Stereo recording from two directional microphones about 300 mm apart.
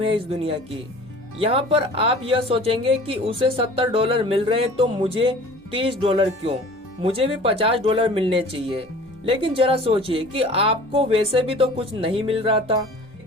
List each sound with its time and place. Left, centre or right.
0.0 s speech: centre